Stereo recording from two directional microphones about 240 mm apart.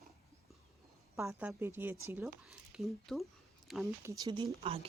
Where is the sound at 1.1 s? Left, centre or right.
Centre.